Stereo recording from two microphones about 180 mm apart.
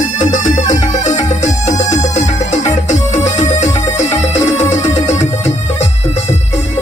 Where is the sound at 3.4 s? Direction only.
40° left (ahead or behind).